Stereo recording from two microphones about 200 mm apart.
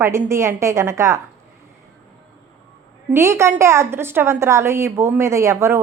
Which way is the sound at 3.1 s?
15° right (ahead or behind).